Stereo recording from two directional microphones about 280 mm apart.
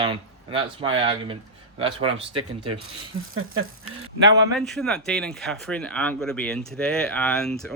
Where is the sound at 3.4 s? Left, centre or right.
Right.